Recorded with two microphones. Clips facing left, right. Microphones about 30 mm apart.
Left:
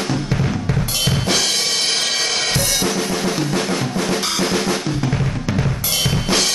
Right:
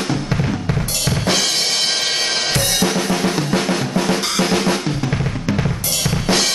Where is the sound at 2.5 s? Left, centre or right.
Right.